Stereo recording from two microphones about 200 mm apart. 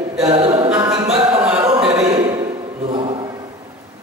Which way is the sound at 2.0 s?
20° right (ahead or behind).